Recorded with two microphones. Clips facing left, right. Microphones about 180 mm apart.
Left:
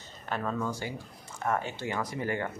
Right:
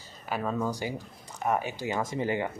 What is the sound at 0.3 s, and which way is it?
Speech, 10° right (ahead or behind).